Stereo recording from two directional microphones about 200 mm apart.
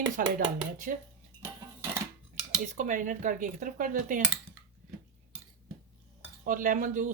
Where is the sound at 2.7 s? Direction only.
40° right (ahead or behind).